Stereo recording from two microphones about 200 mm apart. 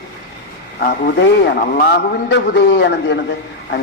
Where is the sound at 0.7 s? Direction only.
45° left (ahead or behind).